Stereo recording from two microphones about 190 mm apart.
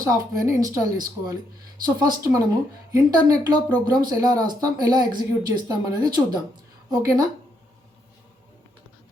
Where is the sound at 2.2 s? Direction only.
15° right (ahead or behind).